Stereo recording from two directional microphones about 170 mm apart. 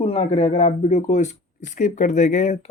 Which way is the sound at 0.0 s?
35° left (ahead or behind).